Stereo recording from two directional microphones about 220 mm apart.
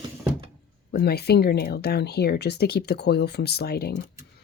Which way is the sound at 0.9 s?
45° left (ahead or behind).